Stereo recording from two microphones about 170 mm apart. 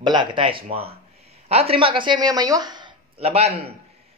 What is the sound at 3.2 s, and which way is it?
Speech, 35° right (ahead or behind).